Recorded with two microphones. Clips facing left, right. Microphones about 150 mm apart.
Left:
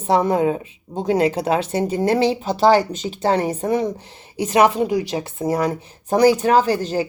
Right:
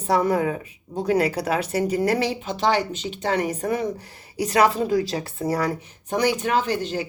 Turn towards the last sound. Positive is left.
turn(degrees=40)  # may be behind; listen again after turning